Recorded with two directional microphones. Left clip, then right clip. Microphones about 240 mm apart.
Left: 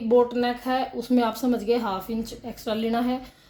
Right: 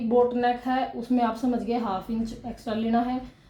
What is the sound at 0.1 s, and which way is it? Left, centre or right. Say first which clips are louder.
Speech: left 1 dB; left.